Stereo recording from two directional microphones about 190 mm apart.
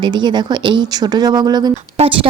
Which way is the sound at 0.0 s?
25° right (ahead or behind).